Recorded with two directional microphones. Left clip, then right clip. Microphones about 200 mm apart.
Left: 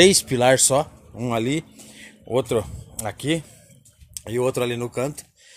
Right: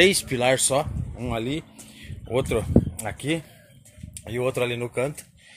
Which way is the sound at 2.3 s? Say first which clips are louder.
Left 3 dB; 15° left (ahead or behind).